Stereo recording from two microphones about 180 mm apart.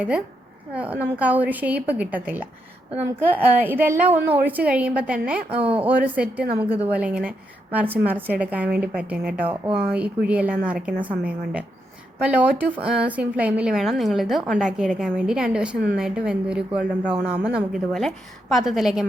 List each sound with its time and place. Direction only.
0.7 s a woman's voice: 10° right (ahead or behind)
5.5 s speech: 30° right (ahead or behind)
5.8 s a woman's voice: 10° right (ahead or behind)